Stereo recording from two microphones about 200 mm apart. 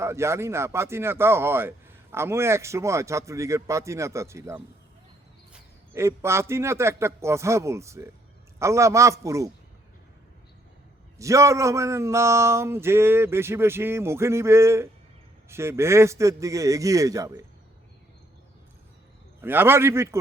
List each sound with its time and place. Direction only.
0.0 s speech: 15° right (ahead or behind)
11.2 s speech: 15° right (ahead or behind)
19.4 s speech: 10° right (ahead or behind)